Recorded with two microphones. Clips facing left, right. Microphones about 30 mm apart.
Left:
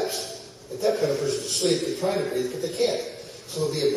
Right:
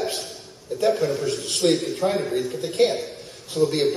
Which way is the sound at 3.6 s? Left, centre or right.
Right.